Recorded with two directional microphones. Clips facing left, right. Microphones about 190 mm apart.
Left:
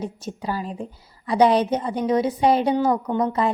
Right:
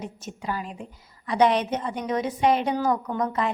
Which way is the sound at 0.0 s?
35° left (ahead or behind).